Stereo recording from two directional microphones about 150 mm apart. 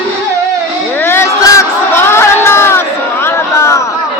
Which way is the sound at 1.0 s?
20° left (ahead or behind).